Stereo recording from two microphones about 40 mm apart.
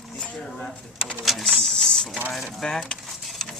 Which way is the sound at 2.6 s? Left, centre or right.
Centre.